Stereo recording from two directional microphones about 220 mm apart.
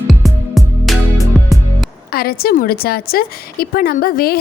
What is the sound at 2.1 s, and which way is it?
A woman's voice, 45° left (ahead or behind).